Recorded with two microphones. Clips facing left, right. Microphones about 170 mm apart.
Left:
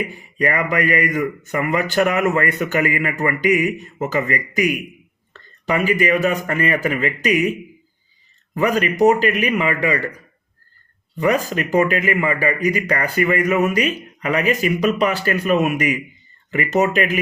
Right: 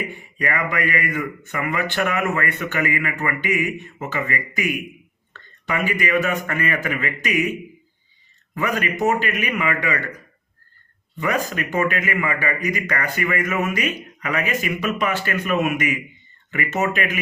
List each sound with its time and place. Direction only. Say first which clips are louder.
0.3 s speech: left 5 dB; 35° left (ahead or behind)
8.5 s speech: left 6 dB; 35° left (ahead or behind)
11.2 s speech: left 5 dB; 35° left (ahead or behind)